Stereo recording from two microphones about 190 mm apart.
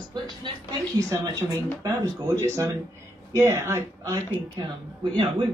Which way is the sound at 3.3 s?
15° right (ahead or behind).